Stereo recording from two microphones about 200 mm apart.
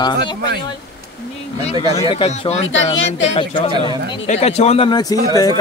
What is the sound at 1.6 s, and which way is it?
A man's voice, 30° left (ahead or behind).